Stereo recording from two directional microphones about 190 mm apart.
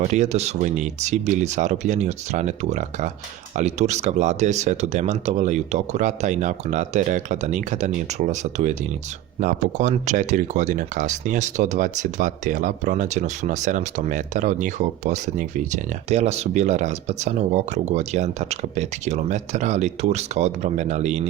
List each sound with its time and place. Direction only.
0.0 s speech: 35° right (ahead or behind)